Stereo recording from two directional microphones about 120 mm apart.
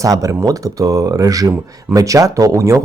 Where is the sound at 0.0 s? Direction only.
25° right (ahead or behind).